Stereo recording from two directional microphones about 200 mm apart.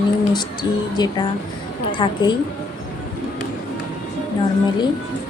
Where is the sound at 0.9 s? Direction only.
20° left (ahead or behind).